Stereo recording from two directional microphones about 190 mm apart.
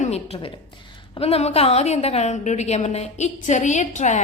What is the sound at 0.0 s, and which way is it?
A woman's voice, 35° left (ahead or behind).